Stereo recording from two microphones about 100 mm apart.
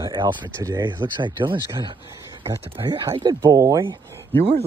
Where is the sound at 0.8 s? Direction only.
50° right (ahead or behind).